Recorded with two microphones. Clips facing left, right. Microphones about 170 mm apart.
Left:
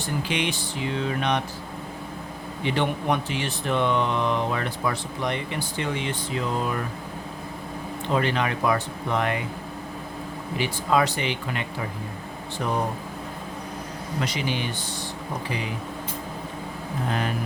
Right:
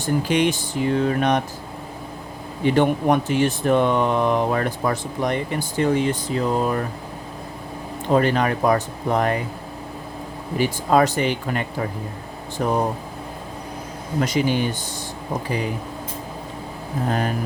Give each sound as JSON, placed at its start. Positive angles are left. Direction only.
{"t": 0.0, "sound": "speech", "side_deg": -45}
{"t": 2.6, "sound": "speech", "side_deg": -45}
{"t": 8.1, "sound": "speech", "side_deg": -45}
{"t": 10.6, "sound": "speech", "side_deg": -45}
{"t": 14.2, "sound": "speech", "side_deg": -45}
{"t": 17.1, "sound": "speech", "side_deg": -40}